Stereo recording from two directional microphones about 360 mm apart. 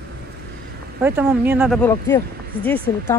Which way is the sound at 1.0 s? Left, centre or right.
Centre.